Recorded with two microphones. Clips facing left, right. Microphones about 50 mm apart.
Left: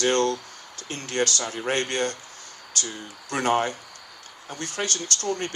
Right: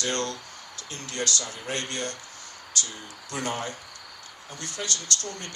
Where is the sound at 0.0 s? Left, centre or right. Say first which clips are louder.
Left 7 dB; left.